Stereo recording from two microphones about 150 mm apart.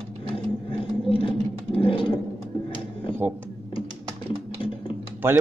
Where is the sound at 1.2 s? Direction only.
35° left (ahead or behind).